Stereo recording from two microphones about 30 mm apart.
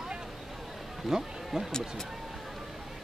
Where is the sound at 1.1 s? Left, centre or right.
Centre.